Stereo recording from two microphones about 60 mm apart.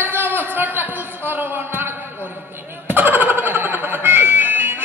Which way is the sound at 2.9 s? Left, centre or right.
Right.